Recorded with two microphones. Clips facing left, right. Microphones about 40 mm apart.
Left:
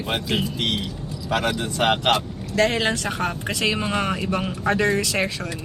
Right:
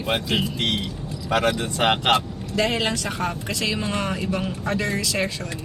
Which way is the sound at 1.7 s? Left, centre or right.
Centre.